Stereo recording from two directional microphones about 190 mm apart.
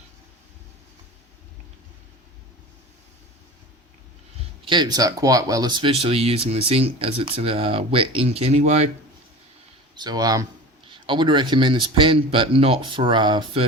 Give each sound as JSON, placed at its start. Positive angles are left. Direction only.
{"t": 4.6, "sound": "speech", "side_deg": -25}
{"t": 9.9, "sound": "speech", "side_deg": -20}